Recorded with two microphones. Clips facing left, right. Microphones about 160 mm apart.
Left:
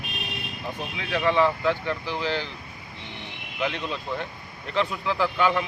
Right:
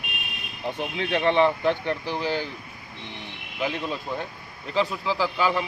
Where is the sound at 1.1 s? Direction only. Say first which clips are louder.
Right 1 dB; 25° right (ahead or behind).